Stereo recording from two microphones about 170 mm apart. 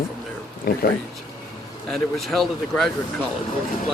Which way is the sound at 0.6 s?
60° left (ahead or behind).